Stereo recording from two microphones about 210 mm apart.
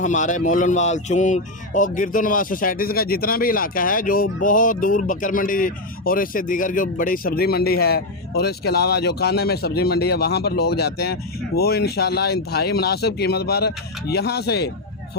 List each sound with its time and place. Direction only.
0.0 s speech: 35° left (ahead or behind)